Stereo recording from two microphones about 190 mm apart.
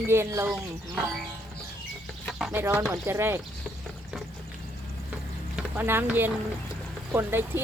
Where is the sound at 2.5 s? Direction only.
10° right (ahead or behind).